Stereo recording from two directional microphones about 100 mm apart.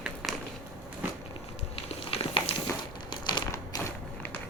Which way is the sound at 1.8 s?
75° left (ahead or behind).